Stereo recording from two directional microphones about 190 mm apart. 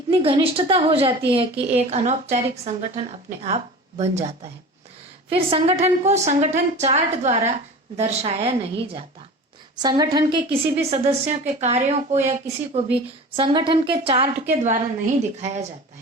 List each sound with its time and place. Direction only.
0.1 s a woman's voice: 30° right (ahead or behind)